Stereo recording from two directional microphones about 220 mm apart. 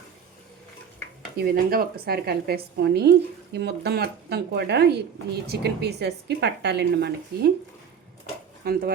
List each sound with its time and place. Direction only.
1.4 s a woman's voice: 45° right (ahead or behind)
8.6 s a woman's voice: 45° right (ahead or behind)